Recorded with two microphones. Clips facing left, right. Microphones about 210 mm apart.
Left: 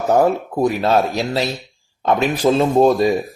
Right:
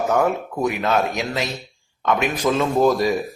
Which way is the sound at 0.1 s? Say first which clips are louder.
Left 8 dB; 35° left (ahead or behind).